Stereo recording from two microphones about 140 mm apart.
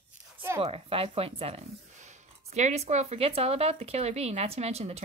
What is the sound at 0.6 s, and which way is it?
Speech, 45° right (ahead or behind).